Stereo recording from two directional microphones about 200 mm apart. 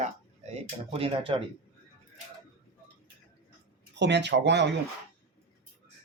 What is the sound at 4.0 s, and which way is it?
Speech, 60° right (ahead or behind).